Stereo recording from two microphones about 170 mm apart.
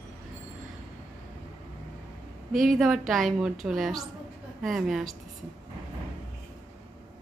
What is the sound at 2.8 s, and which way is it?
A woman's voice, centre (ahead or behind).